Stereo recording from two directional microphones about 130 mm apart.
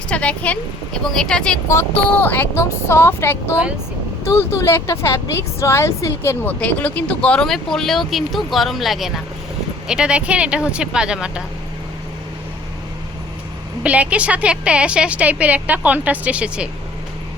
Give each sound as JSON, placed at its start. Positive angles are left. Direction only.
{"t": 0.1, "sound": "speech", "side_deg": 10}
{"t": 1.6, "sound": "a woman's voice", "side_deg": 20}
{"t": 13.8, "sound": "a woman's voice", "side_deg": -10}